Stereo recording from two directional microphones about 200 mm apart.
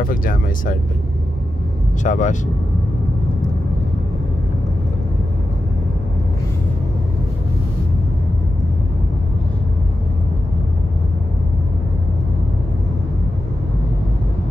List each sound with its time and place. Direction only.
0.0 s speech: 45° left (ahead or behind)
2.0 s speech: 40° left (ahead or behind)